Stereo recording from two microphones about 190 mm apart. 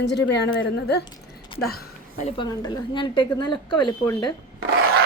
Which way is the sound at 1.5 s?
55° left (ahead or behind).